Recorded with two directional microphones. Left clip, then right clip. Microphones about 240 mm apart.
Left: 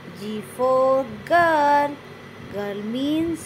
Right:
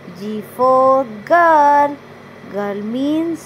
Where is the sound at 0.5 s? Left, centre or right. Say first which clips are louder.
Right 7 dB; centre.